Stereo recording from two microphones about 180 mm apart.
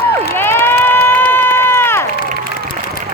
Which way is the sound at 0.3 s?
10° left (ahead or behind).